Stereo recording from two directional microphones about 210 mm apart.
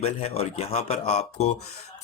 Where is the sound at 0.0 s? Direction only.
30° left (ahead or behind).